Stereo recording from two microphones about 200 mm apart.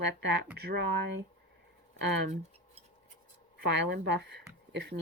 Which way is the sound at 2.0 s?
60° right (ahead or behind).